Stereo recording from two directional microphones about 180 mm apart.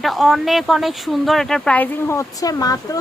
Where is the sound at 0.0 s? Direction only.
Centre (ahead or behind).